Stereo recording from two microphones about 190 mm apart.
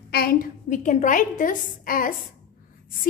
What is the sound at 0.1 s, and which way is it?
A woman's voice, 50° left (ahead or behind).